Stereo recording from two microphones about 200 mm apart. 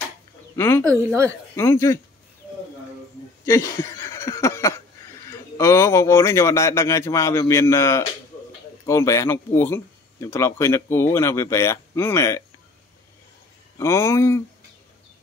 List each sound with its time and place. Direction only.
0.6 s speech: 10° left (ahead or behind)
0.8 s speech: 15° right (ahead or behind)
1.5 s speech: 15° left (ahead or behind)
3.4 s a sound: 15° left (ahead or behind)
5.3 s speech: 15° left (ahead or behind)
13.7 s speech: 15° left (ahead or behind)